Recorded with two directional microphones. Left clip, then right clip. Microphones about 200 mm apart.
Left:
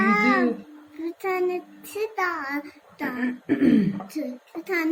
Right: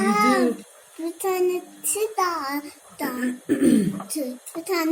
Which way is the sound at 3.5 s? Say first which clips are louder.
Right 1 dB; 25° left (ahead or behind).